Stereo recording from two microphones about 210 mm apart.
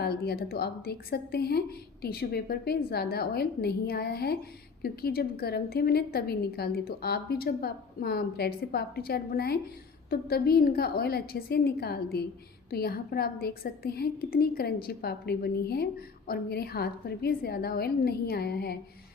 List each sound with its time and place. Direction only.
0.0 s a woman's voice: 50° left (ahead or behind)